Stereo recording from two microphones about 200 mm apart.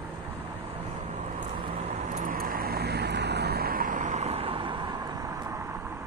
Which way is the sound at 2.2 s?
45° right (ahead or behind).